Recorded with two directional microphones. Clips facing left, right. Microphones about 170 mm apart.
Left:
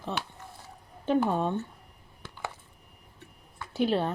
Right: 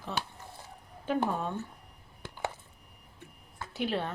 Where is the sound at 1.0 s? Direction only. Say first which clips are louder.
Left 5 dB; 25° left (ahead or behind).